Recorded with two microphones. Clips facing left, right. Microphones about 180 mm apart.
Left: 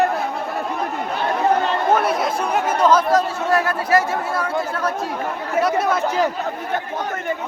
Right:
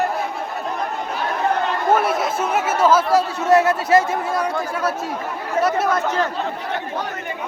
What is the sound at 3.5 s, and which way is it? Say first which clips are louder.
Speech: right 4 dB; 20° right (ahead or behind).